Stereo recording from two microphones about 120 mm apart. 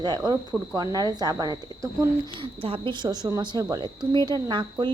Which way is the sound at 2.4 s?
50° right (ahead or behind).